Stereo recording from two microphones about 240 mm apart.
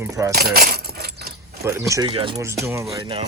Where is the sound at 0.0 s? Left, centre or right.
Centre.